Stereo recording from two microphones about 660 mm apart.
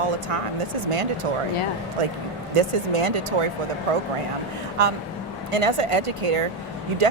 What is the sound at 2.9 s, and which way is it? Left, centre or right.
Speech, right.